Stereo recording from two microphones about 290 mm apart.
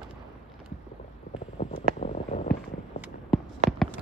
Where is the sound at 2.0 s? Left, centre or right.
Left.